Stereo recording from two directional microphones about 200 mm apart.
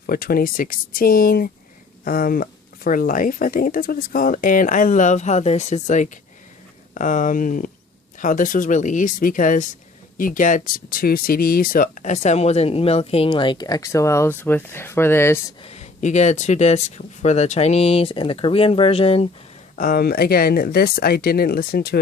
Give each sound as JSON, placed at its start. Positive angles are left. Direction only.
{"t": 0.1, "sound": "speech", "side_deg": 50}
{"t": 15.6, "sound": "speech", "side_deg": 30}
{"t": 19.7, "sound": "speech", "side_deg": 45}